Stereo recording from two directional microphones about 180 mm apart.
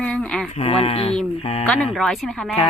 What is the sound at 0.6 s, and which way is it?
Speech, 35° left (ahead or behind).